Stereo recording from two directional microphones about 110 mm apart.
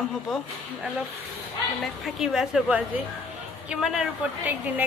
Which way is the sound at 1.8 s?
Centre (ahead or behind).